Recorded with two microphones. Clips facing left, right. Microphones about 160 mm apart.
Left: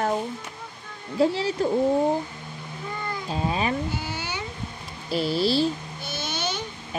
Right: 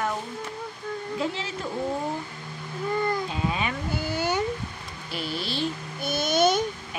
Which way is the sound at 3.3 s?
35° left (ahead or behind).